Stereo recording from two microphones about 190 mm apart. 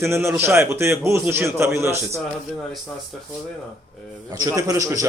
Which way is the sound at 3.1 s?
Centre (ahead or behind).